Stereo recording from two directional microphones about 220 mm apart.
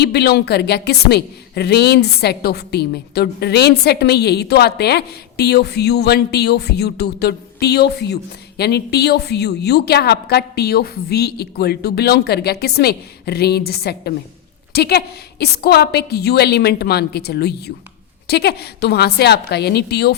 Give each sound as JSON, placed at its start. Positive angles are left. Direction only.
{"t": 0.0, "sound": "a woman's voice", "side_deg": 45}